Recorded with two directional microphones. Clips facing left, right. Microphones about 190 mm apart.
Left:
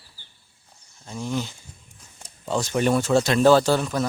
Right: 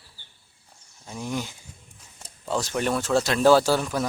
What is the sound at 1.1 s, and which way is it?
Speech, 10° right (ahead or behind).